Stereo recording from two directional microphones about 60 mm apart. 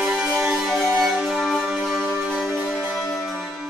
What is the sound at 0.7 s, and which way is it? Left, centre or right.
Music, centre.